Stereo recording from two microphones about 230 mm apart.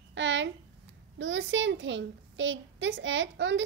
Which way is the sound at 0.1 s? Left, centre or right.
Right.